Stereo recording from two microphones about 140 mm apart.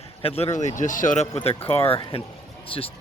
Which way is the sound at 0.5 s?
60° left (ahead or behind).